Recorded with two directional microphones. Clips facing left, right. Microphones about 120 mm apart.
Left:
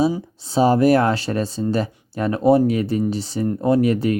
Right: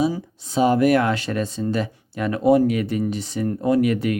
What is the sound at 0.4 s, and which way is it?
Speech, 35° left (ahead or behind).